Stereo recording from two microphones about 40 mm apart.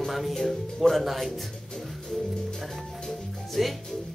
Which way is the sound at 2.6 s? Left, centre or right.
Centre.